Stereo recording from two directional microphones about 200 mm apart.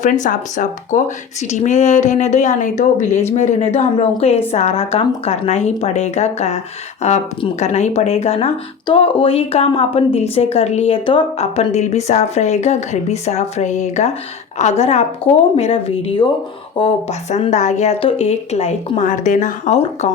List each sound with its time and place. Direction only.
0.0 s a woman's voice: 40° left (ahead or behind)